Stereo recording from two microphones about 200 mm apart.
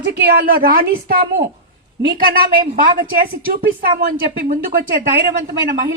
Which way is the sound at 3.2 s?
50° right (ahead or behind).